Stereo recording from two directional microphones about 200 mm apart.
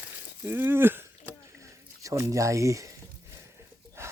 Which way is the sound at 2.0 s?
15° right (ahead or behind).